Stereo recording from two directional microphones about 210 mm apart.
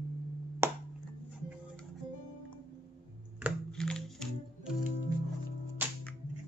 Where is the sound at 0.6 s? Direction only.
10° right (ahead or behind).